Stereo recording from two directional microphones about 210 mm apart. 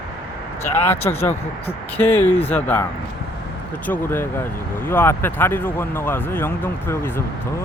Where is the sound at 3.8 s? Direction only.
10° left (ahead or behind).